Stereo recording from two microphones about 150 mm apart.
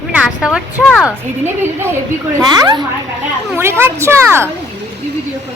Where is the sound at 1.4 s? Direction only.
15° right (ahead or behind).